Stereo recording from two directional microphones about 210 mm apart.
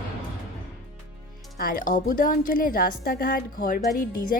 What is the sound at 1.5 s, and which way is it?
A woman's voice, 45° left (ahead or behind).